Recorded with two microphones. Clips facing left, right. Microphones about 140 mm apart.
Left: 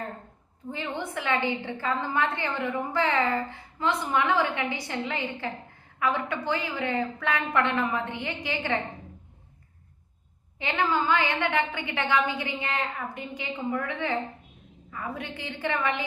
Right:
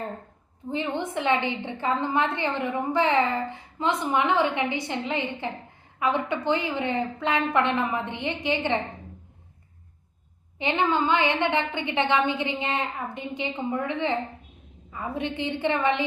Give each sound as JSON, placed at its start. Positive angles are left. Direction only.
{"t": 0.7, "sound": "a woman's voice", "side_deg": -20}
{"t": 10.6, "sound": "a woman's voice", "side_deg": -20}